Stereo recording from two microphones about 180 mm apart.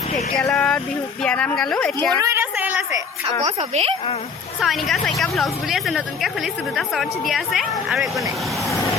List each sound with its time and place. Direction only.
0.3 s speech: 5° left (ahead or behind)
2.1 s a sound: 15° right (ahead or behind)
3.4 s a woman's voice: 35° right (ahead or behind)
4.6 s speech: centre (ahead or behind)